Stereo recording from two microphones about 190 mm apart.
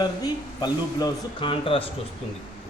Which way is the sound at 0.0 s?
20° left (ahead or behind).